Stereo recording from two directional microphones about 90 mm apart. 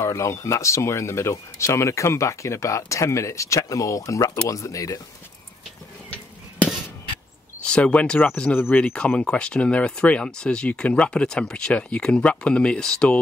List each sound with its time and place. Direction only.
0.0 s speech: 35° left (ahead or behind)
7.6 s speech: 10° left (ahead or behind)